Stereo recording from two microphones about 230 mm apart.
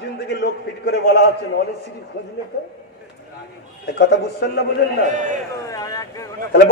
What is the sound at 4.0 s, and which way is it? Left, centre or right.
Speech, left.